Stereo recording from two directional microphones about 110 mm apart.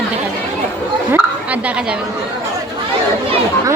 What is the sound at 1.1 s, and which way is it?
Speech, 15° right (ahead or behind).